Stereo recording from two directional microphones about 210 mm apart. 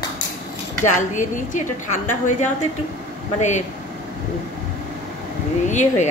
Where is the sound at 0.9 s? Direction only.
35° left (ahead or behind).